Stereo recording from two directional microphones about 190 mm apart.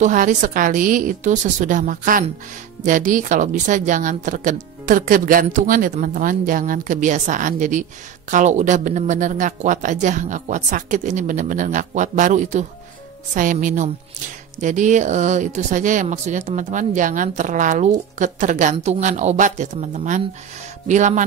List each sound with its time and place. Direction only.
0.0 s a woman's voice: 40° right (ahead or behind)